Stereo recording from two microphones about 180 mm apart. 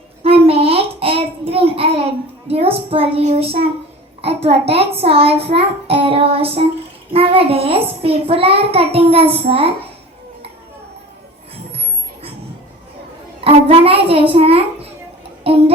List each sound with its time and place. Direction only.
0.2 s child singing: 30° right (ahead or behind)
2.5 s a child's voice: 30° right (ahead or behind)
13.4 s a child's voice: 35° right (ahead or behind)